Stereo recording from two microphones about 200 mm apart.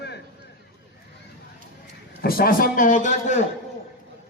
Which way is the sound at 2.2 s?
50° left (ahead or behind).